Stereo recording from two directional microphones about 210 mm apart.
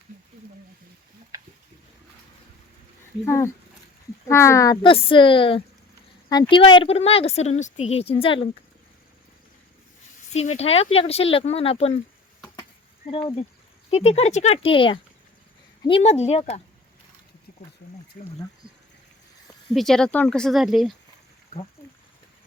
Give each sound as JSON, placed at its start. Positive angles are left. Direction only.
{"t": 3.2, "sound": "a woman's voice", "side_deg": 15}
{"t": 10.3, "sound": "a woman's voice", "side_deg": 30}
{"t": 13.1, "sound": "a woman's voice", "side_deg": 25}
{"t": 19.7, "sound": "speech", "side_deg": 0}